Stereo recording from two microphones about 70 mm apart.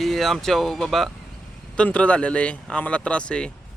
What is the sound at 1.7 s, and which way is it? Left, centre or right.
Speech, centre.